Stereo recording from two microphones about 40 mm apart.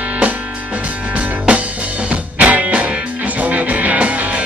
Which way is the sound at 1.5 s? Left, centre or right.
Right.